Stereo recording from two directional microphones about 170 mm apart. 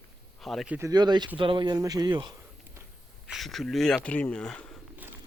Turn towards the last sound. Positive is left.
turn(degrees=5)  # may be behind; listen again after turning